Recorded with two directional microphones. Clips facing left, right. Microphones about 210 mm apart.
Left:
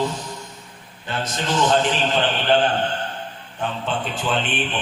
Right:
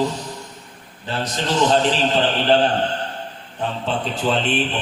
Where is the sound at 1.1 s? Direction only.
35° right (ahead or behind).